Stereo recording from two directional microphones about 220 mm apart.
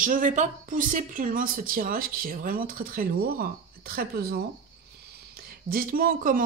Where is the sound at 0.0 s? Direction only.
35° right (ahead or behind).